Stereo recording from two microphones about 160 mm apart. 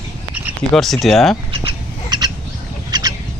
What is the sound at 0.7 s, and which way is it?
Speech, centre (ahead or behind).